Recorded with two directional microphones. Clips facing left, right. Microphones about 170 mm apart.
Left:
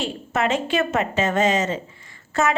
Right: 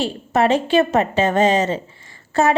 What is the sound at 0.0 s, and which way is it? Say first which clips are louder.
A woman's voice: right 5 dB; 35° right (ahead or behind).